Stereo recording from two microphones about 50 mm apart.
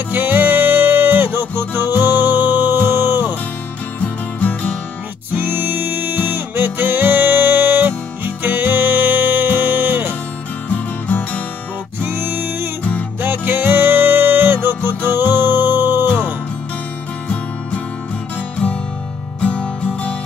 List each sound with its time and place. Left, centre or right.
0.1 s music: right
4.0 s music: left
5.3 s music: right
10.7 s music: left
12.0 s music: right
19.4 s music: left